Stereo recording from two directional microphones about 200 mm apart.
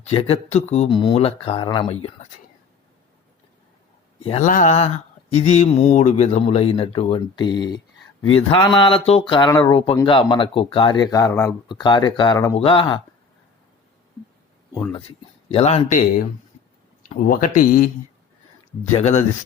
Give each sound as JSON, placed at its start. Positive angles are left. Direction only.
{"t": 0.0, "sound": "speech", "side_deg": 30}
{"t": 4.2, "sound": "speech", "side_deg": 30}
{"t": 14.7, "sound": "speech", "side_deg": 25}